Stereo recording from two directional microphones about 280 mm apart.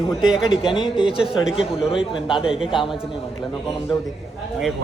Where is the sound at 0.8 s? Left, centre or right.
Centre.